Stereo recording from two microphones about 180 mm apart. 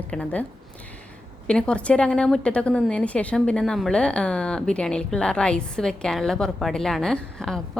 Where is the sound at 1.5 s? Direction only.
5° left (ahead or behind).